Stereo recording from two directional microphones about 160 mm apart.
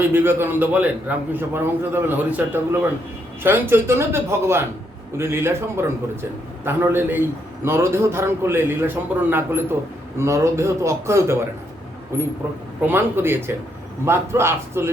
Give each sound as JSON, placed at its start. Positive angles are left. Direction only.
{"t": 0.1, "sound": "a man's voice", "side_deg": -15}